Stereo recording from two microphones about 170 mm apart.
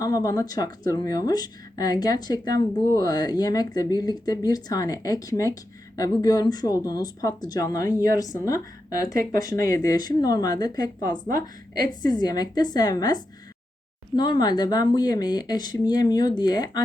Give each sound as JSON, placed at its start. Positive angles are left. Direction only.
{"t": 0.0, "sound": "speech", "side_deg": 20}